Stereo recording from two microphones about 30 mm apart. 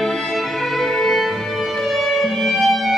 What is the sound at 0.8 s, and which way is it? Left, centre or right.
Music, centre.